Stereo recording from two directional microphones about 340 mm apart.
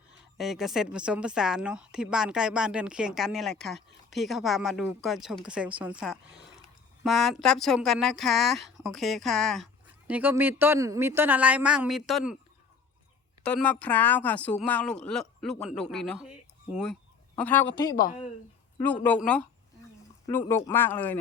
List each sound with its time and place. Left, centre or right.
0.3 s speech: centre
13.4 s speech: centre
18.8 s speech: centre